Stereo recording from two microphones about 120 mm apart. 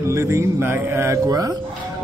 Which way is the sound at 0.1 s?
25° right (ahead or behind).